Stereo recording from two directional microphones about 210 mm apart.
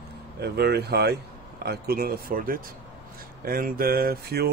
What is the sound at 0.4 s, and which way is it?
Speech, 50° right (ahead or behind).